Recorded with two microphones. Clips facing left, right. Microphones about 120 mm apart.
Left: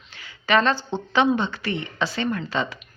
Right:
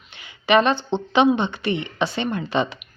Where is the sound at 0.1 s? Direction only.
20° right (ahead or behind).